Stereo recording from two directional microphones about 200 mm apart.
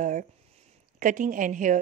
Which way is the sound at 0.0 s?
40° right (ahead or behind).